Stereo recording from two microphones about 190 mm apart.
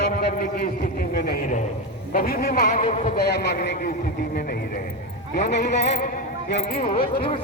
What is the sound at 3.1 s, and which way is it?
Speech, 60° left (ahead or behind).